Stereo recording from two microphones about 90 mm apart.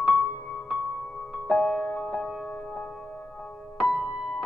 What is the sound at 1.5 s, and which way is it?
Music, 5° left (ahead or behind).